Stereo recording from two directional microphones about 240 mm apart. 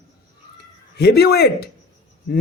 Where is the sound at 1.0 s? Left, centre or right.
Left.